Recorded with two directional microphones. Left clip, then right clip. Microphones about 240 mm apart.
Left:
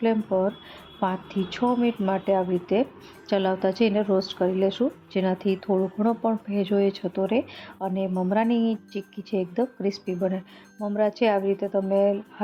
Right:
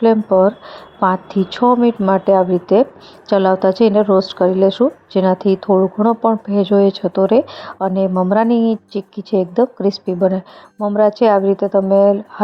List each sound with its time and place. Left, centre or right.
0.0 s speech: right